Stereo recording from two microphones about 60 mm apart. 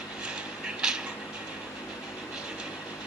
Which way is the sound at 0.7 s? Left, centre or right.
Centre.